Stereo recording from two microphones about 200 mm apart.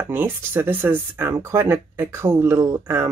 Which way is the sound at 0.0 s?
10° right (ahead or behind).